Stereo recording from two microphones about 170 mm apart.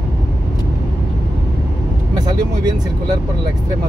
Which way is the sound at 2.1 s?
20° right (ahead or behind).